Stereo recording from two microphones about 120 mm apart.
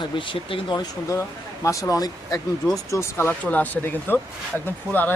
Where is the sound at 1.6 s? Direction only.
30° left (ahead or behind).